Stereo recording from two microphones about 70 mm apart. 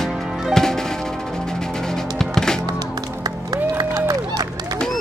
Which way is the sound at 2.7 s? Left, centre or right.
Right.